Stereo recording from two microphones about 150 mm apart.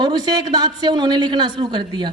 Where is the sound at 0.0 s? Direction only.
25° right (ahead or behind).